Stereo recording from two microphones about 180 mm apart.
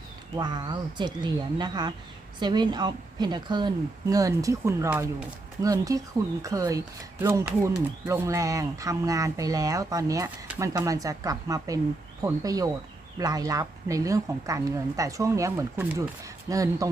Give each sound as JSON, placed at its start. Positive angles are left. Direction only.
{"t": 0.3, "sound": "speech", "side_deg": -25}